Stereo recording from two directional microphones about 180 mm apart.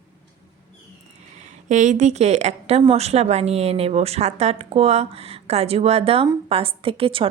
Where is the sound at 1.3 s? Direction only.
40° right (ahead or behind).